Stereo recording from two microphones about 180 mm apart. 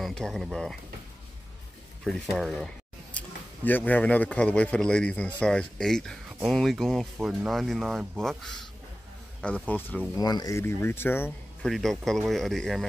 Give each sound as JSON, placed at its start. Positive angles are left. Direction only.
{"t": 0.0, "sound": "speech", "side_deg": 5}
{"t": 2.0, "sound": "speech", "side_deg": 0}
{"t": 10.2, "sound": "speech", "side_deg": 20}